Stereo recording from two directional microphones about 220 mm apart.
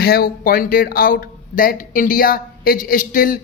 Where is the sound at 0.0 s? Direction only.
45° left (ahead or behind).